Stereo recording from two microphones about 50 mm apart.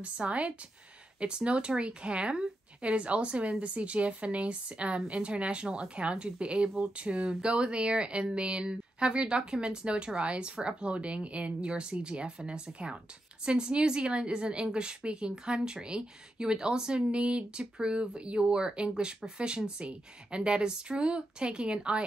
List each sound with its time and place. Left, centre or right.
0.0 s a woman's voice: right